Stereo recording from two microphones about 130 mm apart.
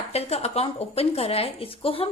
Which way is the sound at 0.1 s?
55° left (ahead or behind).